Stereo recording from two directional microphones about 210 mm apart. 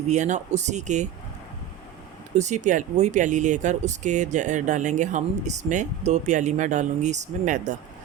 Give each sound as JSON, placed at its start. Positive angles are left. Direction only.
{"t": 0.1, "sound": "speech", "side_deg": -35}
{"t": 2.3, "sound": "speech", "side_deg": -35}